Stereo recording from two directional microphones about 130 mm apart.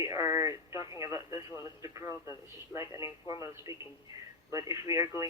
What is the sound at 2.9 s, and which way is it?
Speech, 25° right (ahead or behind).